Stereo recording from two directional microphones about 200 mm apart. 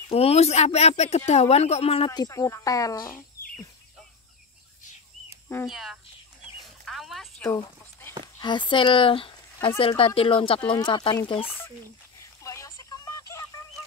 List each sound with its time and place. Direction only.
0.1 s speech: 30° left (ahead or behind); by 3.3 s 15° left (ahead or behind)
5.7 s speech: centre (ahead or behind)
6.6 s a sound: centre (ahead or behind)
8.4 s speech: 25° left (ahead or behind)
12.4 s telephone: 15° left (ahead or behind)